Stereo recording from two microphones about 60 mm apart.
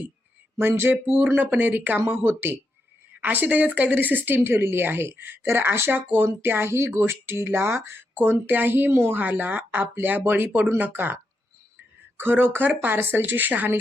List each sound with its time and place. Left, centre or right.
0.8 s speech: right
2.0 s speech: right
9.2 s speech: right